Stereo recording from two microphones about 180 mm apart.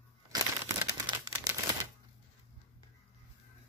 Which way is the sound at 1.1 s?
25° right (ahead or behind).